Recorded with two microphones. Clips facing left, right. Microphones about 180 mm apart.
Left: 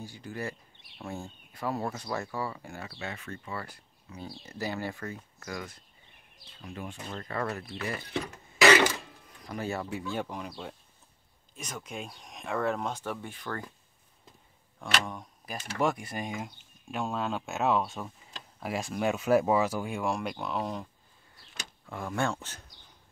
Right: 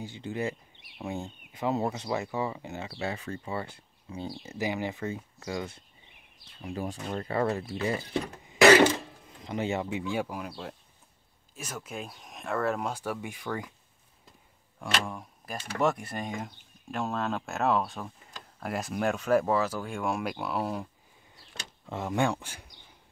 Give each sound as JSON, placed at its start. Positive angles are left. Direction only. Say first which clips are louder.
{"t": 0.0, "sound": "speech", "louder": "right 5 dB", "side_deg": -20}
{"t": 4.4, "sound": "speech", "louder": "right 2 dB", "side_deg": -15}
{"t": 10.1, "sound": "speech", "louder": "right 2 dB", "side_deg": -5}
{"t": 14.8, "sound": "speech", "louder": "right 1 dB", "side_deg": -5}
{"t": 21.8, "sound": "speech", "louder": "right 3 dB", "side_deg": -20}